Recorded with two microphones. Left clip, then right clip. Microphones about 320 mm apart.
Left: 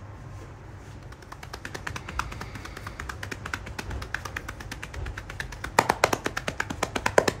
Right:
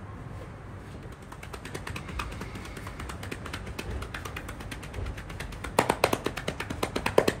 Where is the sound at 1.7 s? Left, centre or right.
Centre.